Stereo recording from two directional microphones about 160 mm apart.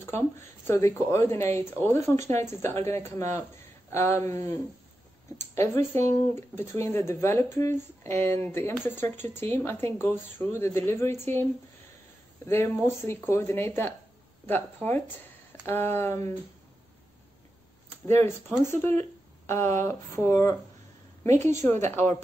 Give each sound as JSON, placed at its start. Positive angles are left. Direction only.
{"t": 0.0, "sound": "speech", "side_deg": 15}
{"t": 5.4, "sound": "speech", "side_deg": 15}
{"t": 12.4, "sound": "speech", "side_deg": 15}
{"t": 18.0, "sound": "a woman's voice", "side_deg": 15}